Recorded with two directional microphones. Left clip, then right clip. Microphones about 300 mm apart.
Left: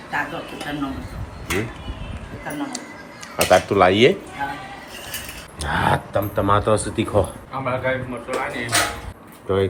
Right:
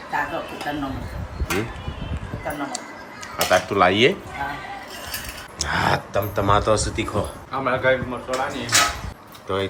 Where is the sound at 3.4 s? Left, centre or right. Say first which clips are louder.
Left 3 dB; centre.